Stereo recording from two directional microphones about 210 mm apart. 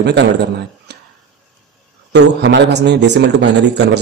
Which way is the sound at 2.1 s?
55° right (ahead or behind).